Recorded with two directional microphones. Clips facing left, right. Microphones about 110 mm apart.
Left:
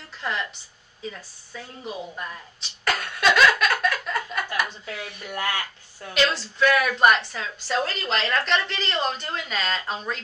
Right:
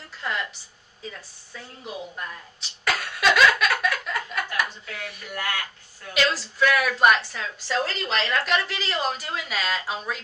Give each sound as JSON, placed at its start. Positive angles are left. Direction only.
{"t": 0.2, "sound": "a woman's voice", "side_deg": 0}
{"t": 2.8, "sound": "a sound", "side_deg": 0}
{"t": 5.0, "sound": "speech", "side_deg": 20}
{"t": 6.2, "sound": "a woman's voice", "side_deg": -5}